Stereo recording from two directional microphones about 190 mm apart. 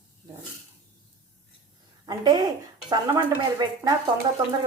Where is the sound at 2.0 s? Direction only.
20° right (ahead or behind).